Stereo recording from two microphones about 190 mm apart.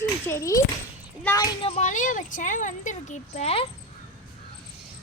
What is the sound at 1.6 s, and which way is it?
Speech, 35° left (ahead or behind).